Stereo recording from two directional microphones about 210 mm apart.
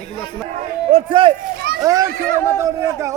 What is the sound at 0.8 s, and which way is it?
Speech, 25° right (ahead or behind).